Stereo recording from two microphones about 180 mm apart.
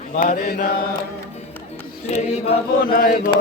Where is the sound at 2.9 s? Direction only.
55° left (ahead or behind).